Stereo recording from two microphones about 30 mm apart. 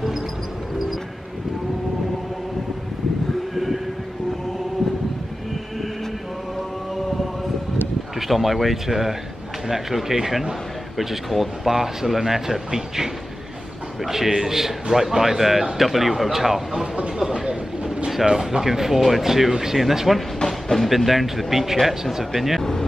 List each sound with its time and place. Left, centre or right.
3.5 s train: centre
8.2 s a man's voice: centre
17.2 s train: right
18.2 s a man's voice: right
19.5 s a man's voice: centre
20.6 s music: centre
20.9 s a man's voice: centre
22.6 s a sound: centre